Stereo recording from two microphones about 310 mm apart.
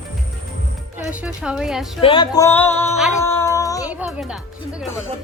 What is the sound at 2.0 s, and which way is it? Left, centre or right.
Music, centre.